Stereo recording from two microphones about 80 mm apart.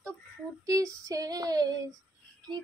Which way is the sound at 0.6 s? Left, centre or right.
Right.